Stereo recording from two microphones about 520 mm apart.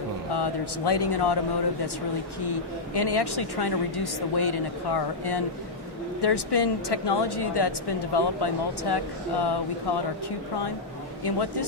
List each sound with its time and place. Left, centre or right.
0.3 s a woman's voice: left
2.5 s a woman's voice: left
11.2 s a woman's voice: left